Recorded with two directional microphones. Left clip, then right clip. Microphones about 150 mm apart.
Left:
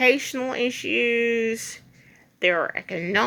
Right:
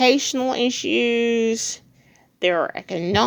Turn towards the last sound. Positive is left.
turn(degrees=-30)  # may be behind; listen again after turning